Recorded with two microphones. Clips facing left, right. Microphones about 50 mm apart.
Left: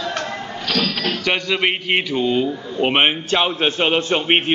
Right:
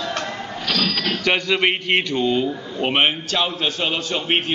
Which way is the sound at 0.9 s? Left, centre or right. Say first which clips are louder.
Even; centre.